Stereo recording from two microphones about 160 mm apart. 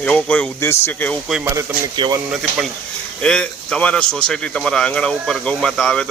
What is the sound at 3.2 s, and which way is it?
Speech, 5° left (ahead or behind).